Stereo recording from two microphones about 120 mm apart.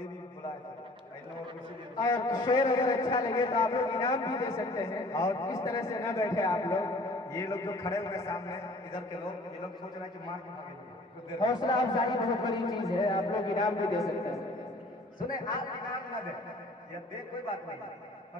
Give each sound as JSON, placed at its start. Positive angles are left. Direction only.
{"t": 2.0, "sound": "a man's voice", "side_deg": 30}
{"t": 11.3, "sound": "a man's voice", "side_deg": 35}
{"t": 12.5, "sound": "speech", "side_deg": 0}
{"t": 12.9, "sound": "a man's voice", "side_deg": 30}